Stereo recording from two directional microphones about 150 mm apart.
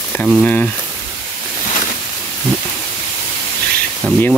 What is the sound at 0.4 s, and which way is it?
Rub, 10° left (ahead or behind).